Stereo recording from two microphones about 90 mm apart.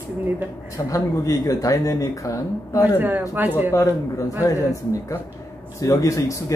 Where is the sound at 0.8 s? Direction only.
40° left (ahead or behind).